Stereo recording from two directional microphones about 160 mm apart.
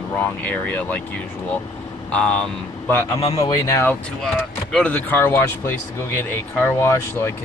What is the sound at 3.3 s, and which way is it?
Speech, 20° left (ahead or behind).